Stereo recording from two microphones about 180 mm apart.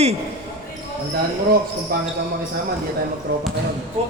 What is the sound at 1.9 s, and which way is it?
Speech, 55° right (ahead or behind).